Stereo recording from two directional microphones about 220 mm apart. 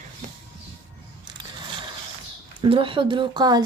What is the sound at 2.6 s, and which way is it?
Speech, 25° right (ahead or behind).